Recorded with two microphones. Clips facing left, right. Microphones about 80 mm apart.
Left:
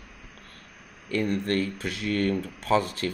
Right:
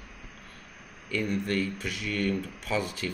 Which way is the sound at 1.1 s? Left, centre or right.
Left.